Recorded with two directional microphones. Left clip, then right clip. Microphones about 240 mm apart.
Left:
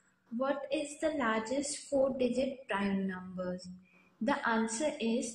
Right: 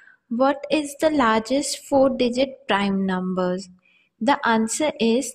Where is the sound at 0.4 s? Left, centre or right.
Right.